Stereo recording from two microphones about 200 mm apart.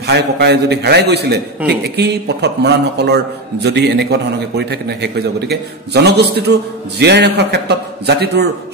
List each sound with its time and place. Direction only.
0.0 s a man's voice: 55° right (ahead or behind)